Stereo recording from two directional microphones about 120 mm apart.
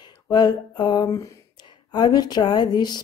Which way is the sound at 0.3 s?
35° left (ahead or behind).